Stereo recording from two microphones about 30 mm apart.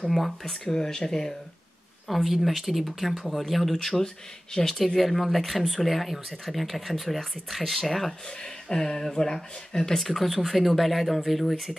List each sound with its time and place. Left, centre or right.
0.1 s speech: centre
0.7 s speech: left
2.0 s speech: centre
8.6 s speech: centre
9.9 s speech: centre